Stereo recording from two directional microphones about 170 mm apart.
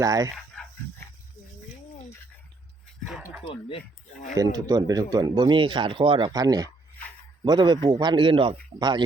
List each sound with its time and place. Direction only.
0.0 s speech: 20° right (ahead or behind)
0.3 s dog: 5° left (ahead or behind)
3.1 s speech: centre (ahead or behind)
3.4 s speech: 30° left (ahead or behind)
4.4 s speech: 20° right (ahead or behind)